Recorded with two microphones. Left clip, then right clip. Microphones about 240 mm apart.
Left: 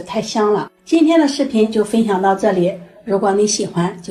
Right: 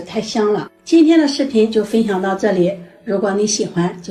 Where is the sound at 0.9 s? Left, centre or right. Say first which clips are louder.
Right 1 dB; centre.